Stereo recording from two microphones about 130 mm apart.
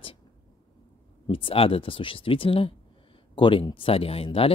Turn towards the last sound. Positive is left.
turn(degrees=45)  # may be behind; listen again after turning